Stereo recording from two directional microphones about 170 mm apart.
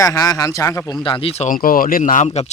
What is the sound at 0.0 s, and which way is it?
Speech, 20° left (ahead or behind).